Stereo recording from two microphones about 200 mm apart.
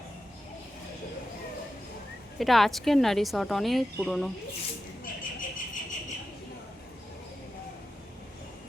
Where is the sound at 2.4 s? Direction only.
Centre (ahead or behind).